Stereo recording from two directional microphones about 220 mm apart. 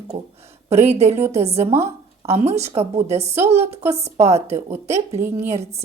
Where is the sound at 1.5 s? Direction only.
10° right (ahead or behind).